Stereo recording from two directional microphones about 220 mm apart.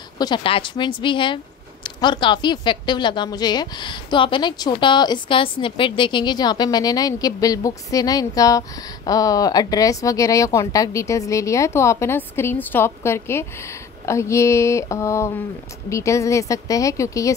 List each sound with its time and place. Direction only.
0.2 s speech: 20° left (ahead or behind)